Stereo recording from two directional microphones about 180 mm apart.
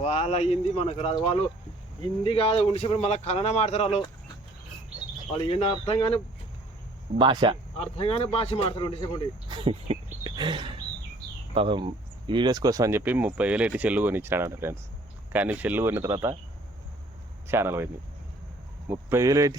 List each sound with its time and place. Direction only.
0.0 s speech: 35° left (ahead or behind)
5.3 s speech: 30° left (ahead or behind)
7.2 s speech: 25° right (ahead or behind)
7.8 s speech: 30° left (ahead or behind)
9.5 s speech: 30° right (ahead or behind)
17.5 s speech: 15° right (ahead or behind)
18.9 s speech: 15° right (ahead or behind)